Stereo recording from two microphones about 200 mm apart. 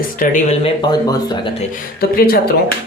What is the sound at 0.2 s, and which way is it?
Speech, 35° left (ahead or behind).